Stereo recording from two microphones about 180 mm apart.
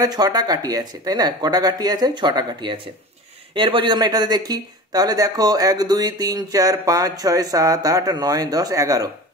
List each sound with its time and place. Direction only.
0.0 s speech: 20° right (ahead or behind)